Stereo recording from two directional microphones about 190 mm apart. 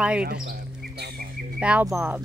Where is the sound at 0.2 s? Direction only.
55° right (ahead or behind).